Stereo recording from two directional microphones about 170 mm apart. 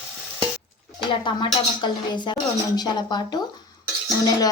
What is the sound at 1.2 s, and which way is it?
Speech, 25° left (ahead or behind).